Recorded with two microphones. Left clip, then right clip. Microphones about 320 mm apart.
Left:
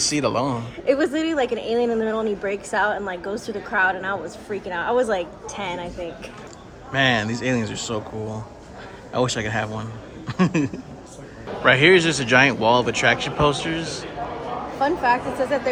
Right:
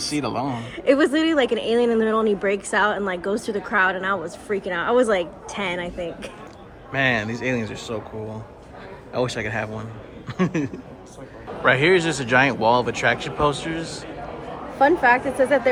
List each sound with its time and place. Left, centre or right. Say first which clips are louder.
0.1 s speech: left 3 dB; centre
0.6 s speech: right 2 dB; right
6.9 s speech: left 1 dB; centre
14.8 s speech: right 4 dB; right